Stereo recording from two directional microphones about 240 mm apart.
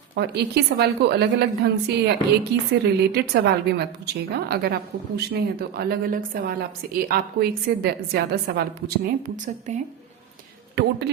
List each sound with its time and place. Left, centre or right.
0.2 s a woman's voice: right